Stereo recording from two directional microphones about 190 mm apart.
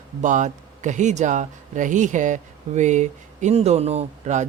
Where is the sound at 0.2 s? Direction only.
40° right (ahead or behind).